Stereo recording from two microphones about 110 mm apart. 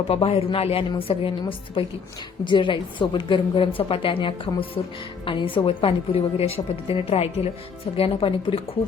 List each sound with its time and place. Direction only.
0.1 s a woman's voice: 65° left (ahead or behind)